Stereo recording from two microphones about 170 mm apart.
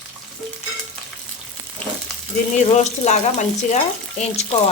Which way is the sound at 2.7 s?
40° left (ahead or behind).